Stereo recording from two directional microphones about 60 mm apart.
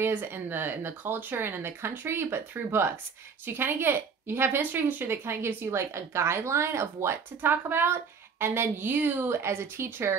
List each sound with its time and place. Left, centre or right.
0.0 s a woman's voice: right
7.4 s a woman's voice: right